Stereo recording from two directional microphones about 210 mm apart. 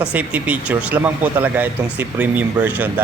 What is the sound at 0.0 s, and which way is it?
Speech, 5° right (ahead or behind).